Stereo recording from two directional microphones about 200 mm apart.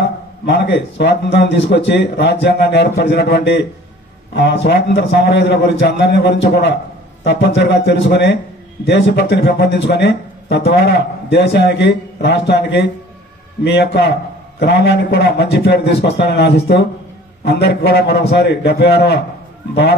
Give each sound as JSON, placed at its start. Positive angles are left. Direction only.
{"t": 0.0, "sound": "speech", "side_deg": 60}